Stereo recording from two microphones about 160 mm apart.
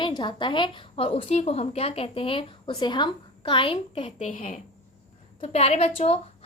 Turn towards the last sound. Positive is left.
turn(degrees=40)  # may be behind; listen again after turning